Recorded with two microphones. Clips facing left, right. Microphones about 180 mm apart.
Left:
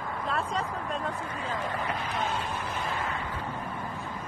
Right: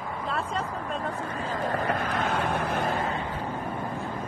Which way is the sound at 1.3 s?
45° right (ahead or behind).